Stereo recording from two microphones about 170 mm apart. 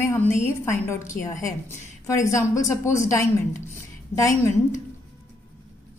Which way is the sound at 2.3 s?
20° left (ahead or behind).